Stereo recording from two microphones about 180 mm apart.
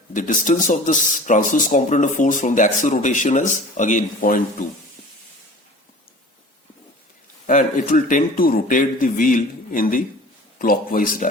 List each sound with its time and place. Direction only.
0.1 s speech: 45° left (ahead or behind)
7.4 s speech: 45° left (ahead or behind)